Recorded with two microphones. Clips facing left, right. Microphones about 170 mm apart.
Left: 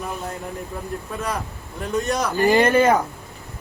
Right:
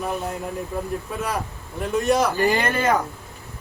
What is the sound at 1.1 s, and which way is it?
A woman's voice, 10° right (ahead or behind).